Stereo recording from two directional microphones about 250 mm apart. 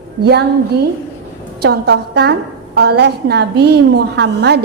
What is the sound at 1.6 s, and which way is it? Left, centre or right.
Speech, right.